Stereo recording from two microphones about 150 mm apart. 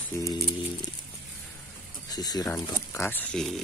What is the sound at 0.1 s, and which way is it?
Speech, 20° left (ahead or behind).